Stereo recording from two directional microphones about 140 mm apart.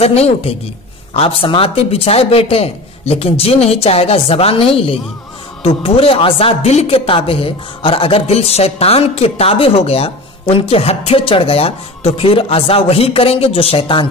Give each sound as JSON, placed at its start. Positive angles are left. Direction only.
{"t": 0.0, "sound": "speech", "side_deg": 45}